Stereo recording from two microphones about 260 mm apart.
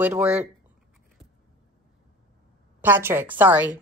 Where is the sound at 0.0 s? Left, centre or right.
Centre.